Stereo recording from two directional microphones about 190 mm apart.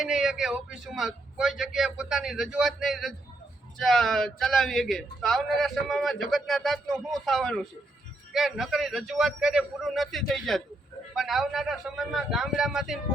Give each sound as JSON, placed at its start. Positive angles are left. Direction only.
{"t": 0.0, "sound": "speech", "side_deg": -5}